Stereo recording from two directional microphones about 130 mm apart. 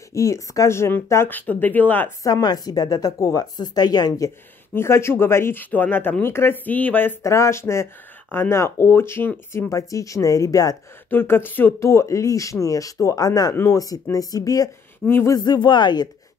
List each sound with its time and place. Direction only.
0.1 s speech: 25° left (ahead or behind)
2.2 s speech: 30° left (ahead or behind)
4.7 s speech: 20° left (ahead or behind)
11.1 s speech: 15° left (ahead or behind)
15.0 s speech: 15° left (ahead or behind)
15.3 s speech: 30° left (ahead or behind)